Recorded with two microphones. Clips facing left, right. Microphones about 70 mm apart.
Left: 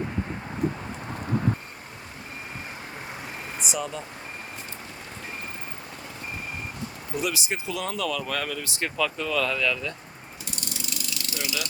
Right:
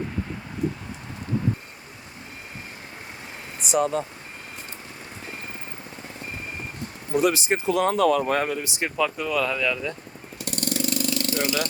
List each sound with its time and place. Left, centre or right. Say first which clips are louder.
3.7 s speech: right 10 dB; right
7.2 s speech: right 8 dB; right; by 9.9 s centre
10.4 s vehicle: right 11 dB; right